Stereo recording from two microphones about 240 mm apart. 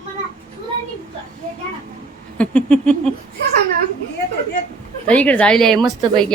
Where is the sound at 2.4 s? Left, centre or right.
Centre.